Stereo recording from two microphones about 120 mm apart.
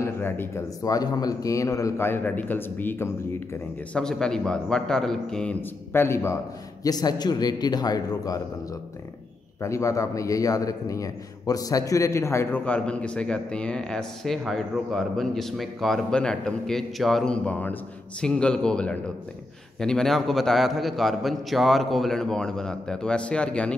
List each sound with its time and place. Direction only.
0.0 s speech: 20° left (ahead or behind)
0.8 s a man's voice: 30° left (ahead or behind)
3.9 s a man's voice: 5° left (ahead or behind)
5.9 s a man's voice: 20° left (ahead or behind)
6.8 s a man's voice: 35° left (ahead or behind)
9.6 s a man's voice: 25° left (ahead or behind); by 23.7 s 10° left (ahead or behind)